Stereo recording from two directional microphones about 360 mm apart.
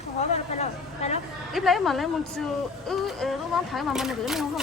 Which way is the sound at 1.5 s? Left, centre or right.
Centre.